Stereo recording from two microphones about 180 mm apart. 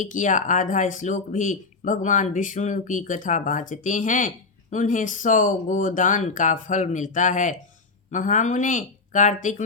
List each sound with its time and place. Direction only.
0.0 s speech: 45° left (ahead or behind)